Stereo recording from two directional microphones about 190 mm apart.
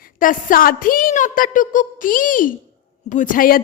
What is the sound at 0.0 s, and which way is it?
A woman's voice, 45° left (ahead or behind).